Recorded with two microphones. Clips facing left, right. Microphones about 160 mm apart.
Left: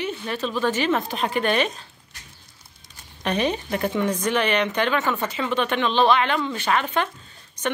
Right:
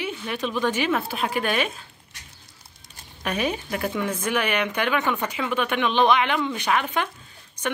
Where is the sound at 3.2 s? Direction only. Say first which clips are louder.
Left 3 dB; 10° right (ahead or behind).